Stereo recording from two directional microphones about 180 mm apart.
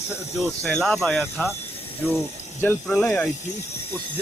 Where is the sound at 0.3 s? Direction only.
Centre (ahead or behind).